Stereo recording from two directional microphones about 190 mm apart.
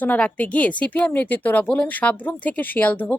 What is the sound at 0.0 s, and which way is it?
Speech, 10° left (ahead or behind).